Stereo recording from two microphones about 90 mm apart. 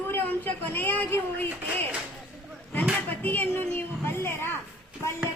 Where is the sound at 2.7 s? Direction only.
20° left (ahead or behind).